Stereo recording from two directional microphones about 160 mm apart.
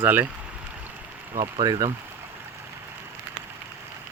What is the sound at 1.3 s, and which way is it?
Speech, 30° right (ahead or behind).